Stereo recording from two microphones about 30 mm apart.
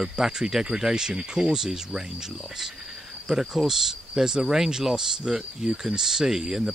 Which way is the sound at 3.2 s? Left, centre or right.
Centre.